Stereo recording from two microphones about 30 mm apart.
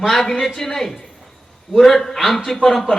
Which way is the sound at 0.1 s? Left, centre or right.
Centre.